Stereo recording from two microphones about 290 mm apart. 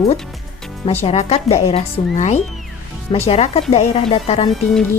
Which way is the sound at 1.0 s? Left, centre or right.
Left.